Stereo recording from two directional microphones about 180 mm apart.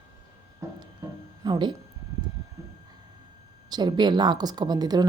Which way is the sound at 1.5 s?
25° right (ahead or behind).